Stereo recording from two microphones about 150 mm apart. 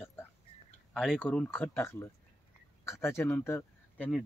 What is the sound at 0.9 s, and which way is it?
Speech, 5° left (ahead or behind).